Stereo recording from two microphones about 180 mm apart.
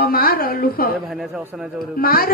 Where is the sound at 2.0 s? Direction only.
55° left (ahead or behind).